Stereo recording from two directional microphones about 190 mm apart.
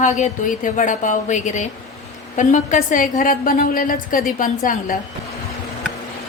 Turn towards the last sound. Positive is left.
turn(degrees=45)  # may be behind; listen again after turning